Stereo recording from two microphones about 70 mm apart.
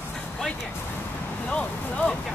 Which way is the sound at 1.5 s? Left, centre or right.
Centre.